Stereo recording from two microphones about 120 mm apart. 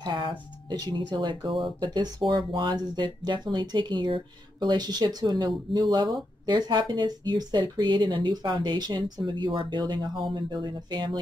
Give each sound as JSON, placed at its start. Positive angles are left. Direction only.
{"t": 0.0, "sound": "speech", "side_deg": -40}